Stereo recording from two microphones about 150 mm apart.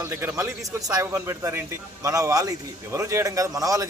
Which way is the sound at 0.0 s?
15° right (ahead or behind).